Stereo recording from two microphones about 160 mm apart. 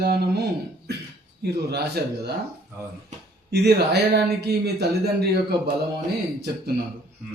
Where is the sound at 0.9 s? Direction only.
90° right.